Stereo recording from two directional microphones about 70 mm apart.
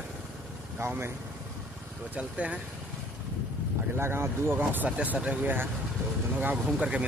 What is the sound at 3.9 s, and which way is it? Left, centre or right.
Speech, right.